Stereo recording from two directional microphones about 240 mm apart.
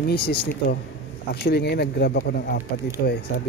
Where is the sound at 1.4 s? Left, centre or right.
Left.